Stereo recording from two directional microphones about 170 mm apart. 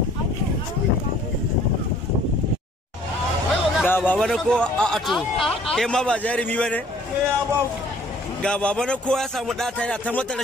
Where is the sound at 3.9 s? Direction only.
10° left (ahead or behind).